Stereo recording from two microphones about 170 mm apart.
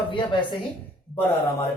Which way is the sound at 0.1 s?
30° left (ahead or behind).